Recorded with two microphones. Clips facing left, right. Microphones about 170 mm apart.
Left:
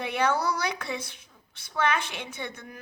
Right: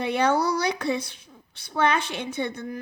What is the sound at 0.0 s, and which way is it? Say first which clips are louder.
A woman's voice: right 4 dB; 35° right (ahead or behind).